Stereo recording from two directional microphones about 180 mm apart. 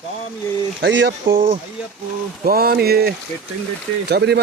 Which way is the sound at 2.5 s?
55° right (ahead or behind).